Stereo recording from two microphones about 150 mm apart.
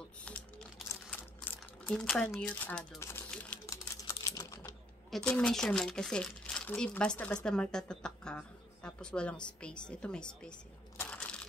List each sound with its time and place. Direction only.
0.8 s a sound: 15° left (ahead or behind)
2.0 s a woman's voice: 5° left (ahead or behind)
3.0 s typing: 15° left (ahead or behind)
5.1 s a woman's voice: 5° left (ahead or behind)
11.0 s crushing: 10° left (ahead or behind)